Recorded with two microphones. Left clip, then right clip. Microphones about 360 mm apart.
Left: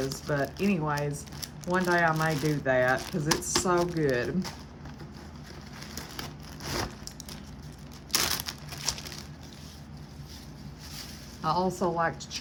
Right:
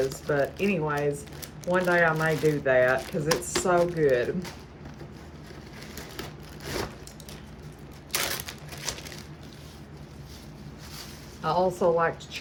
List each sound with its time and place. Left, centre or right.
0.1 s speech: centre
6.0 s wood: centre
8.1 s typewriter: centre
11.4 s speech: centre